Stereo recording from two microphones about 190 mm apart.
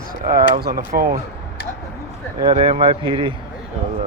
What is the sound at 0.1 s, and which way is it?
Speech, 50° right (ahead or behind).